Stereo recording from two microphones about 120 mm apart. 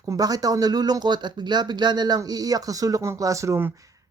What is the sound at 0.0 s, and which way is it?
Speech, 30° right (ahead or behind).